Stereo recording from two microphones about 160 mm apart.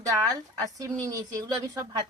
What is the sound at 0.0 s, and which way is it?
Speech, 20° right (ahead or behind).